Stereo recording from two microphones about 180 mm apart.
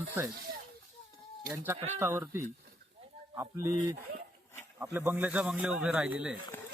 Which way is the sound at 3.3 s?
15° right (ahead or behind).